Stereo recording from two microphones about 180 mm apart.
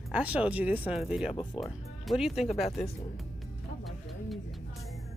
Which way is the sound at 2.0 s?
Centre (ahead or behind).